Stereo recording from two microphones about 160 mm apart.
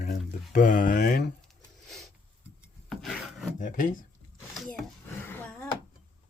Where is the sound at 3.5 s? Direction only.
55° left (ahead or behind).